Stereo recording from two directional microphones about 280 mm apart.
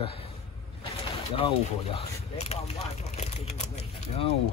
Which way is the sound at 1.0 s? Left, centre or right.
Centre.